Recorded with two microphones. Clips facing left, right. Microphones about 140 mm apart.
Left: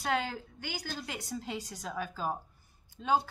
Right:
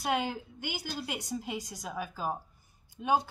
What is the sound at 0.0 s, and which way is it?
Speech, 15° right (ahead or behind).